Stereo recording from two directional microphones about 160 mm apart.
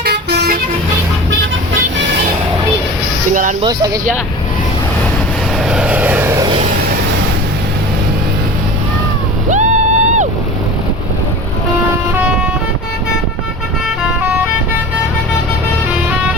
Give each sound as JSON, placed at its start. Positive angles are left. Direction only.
{"t": 0.0, "sound": "vehicle", "side_deg": -90}
{"t": 3.6, "sound": "speech", "side_deg": -25}
{"t": 5.6, "sound": "vehicle", "side_deg": -5}
{"t": 9.5, "sound": "a sound", "side_deg": -45}
{"t": 12.1, "sound": "vehicle", "side_deg": -10}